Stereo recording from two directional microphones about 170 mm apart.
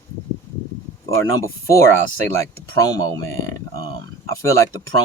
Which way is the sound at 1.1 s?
20° left (ahead or behind).